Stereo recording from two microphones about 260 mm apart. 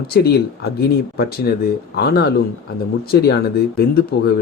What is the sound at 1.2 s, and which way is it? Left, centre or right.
Speech, left.